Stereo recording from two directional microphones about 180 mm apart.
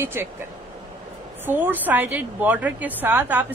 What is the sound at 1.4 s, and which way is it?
A woman's voice, 10° right (ahead or behind).